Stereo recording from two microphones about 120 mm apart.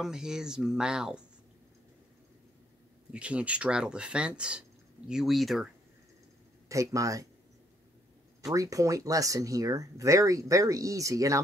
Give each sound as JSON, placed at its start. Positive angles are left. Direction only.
{"t": 0.0, "sound": "speech", "side_deg": -5}
{"t": 3.1, "sound": "speech", "side_deg": -10}
{"t": 6.7, "sound": "speech", "side_deg": -25}
{"t": 8.5, "sound": "speech", "side_deg": -30}